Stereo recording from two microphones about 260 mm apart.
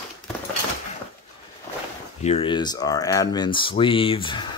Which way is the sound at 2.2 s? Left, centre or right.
Left.